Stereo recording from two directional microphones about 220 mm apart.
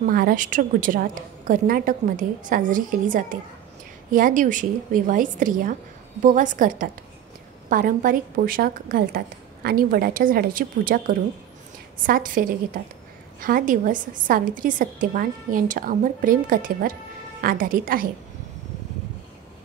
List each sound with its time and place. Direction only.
0.0 s a woman's voice: 40° right (ahead or behind)